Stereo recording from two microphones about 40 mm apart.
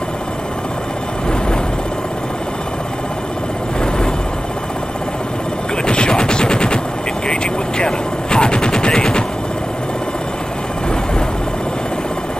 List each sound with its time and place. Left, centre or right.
5.9 s gunshot: left
7.8 s gunshot: left